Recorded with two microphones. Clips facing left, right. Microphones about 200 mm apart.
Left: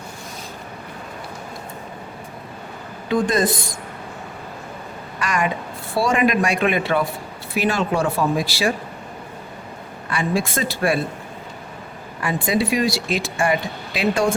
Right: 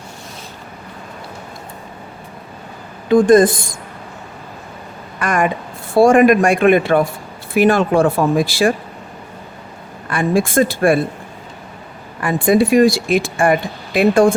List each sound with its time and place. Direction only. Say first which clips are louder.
3.1 s speech: right 9 dB; 50° right (ahead or behind)
5.2 s speech: right 5 dB; 50° right (ahead or behind)
10.1 s speech: right 6 dB; 50° right (ahead or behind)
12.2 s speech: right 7 dB; 50° right (ahead or behind)